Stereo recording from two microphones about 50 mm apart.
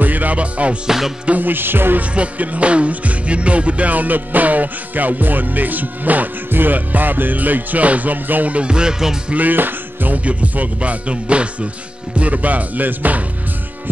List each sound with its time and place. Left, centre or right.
0.0 s music: right
0.8 s music: centre
1.2 s music: right
1.5 s music: right
2.0 s music: right
9.3 s music: right